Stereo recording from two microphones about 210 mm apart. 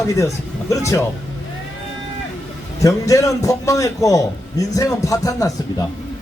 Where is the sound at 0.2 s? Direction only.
15° left (ahead or behind).